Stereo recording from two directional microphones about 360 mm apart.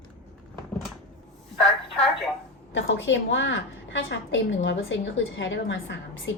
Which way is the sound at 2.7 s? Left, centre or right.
Left.